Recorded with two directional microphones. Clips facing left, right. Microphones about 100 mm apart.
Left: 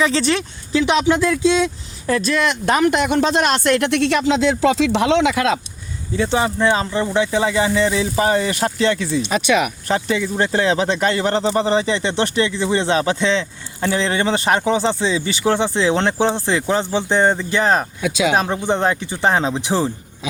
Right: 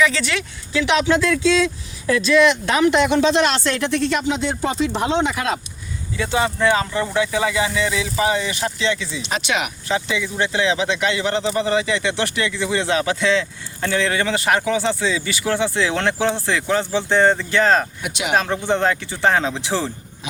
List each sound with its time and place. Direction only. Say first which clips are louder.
0.0 s speech: left 2 dB; 35° left (ahead or behind)
0.9 s speech: even; 15° left (ahead or behind)
2.0 s speech: right 3 dB; 40° left (ahead or behind); by 5.5 s 90° left
6.1 s speech: left 2 dB; 30° left (ahead or behind)